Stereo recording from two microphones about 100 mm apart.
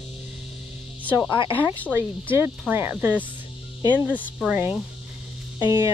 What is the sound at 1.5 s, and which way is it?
Cricket, 20° right (ahead or behind).